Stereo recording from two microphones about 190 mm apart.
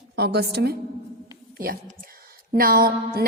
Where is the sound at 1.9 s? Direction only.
50° right (ahead or behind).